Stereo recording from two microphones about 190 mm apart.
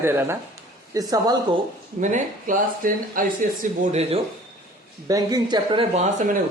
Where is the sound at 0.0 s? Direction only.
15° right (ahead or behind).